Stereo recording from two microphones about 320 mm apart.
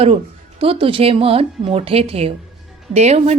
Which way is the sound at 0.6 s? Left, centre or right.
Centre.